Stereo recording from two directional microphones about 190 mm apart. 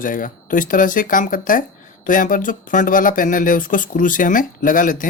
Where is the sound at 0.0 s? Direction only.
45° left (ahead or behind).